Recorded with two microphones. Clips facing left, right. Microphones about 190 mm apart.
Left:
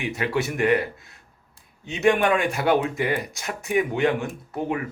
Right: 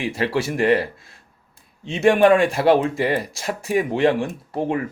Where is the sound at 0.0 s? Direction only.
30° right (ahead or behind).